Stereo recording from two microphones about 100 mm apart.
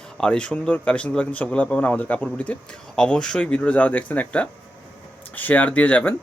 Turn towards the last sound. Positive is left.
turn(degrees=15)  # may be behind; listen again after turning